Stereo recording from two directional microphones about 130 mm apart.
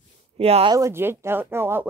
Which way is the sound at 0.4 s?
50° right (ahead or behind).